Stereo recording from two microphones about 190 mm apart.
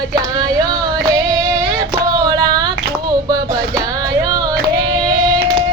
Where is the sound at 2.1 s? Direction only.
20° right (ahead or behind).